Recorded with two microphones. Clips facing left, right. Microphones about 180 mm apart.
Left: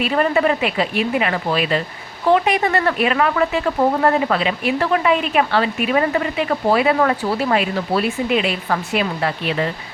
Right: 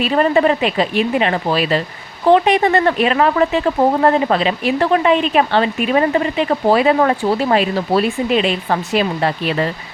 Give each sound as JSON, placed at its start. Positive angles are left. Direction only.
{"t": 0.0, "sound": "speech", "side_deg": -30}